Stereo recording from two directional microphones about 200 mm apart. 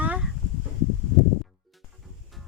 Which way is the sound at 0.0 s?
5° right (ahead or behind).